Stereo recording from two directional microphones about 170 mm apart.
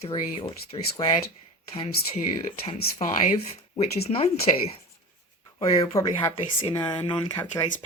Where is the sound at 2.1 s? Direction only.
30° left (ahead or behind).